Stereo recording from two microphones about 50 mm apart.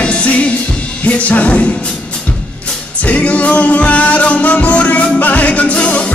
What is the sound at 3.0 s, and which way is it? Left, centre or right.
Music, left.